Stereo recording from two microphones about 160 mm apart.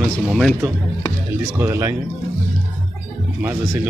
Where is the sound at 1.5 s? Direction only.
15° right (ahead or behind).